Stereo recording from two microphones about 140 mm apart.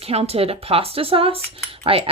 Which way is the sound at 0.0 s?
45° right (ahead or behind).